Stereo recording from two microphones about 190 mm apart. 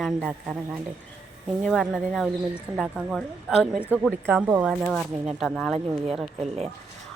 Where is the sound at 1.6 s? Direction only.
Centre (ahead or behind).